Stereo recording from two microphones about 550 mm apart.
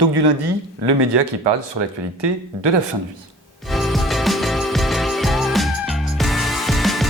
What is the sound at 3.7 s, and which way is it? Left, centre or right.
Music, centre.